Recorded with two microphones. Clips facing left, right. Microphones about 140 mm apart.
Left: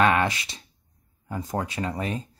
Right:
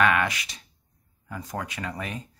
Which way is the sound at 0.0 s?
30° left (ahead or behind).